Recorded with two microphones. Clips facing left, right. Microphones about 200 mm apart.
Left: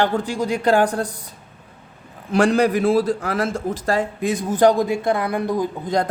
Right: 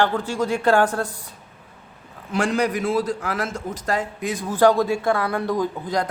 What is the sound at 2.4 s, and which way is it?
A man's voice, 35° left (ahead or behind).